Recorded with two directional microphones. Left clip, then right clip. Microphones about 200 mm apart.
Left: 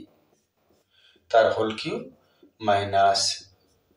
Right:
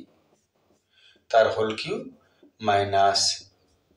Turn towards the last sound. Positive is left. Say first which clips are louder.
# even
turn(degrees=-15)  # may be behind; listen again after turning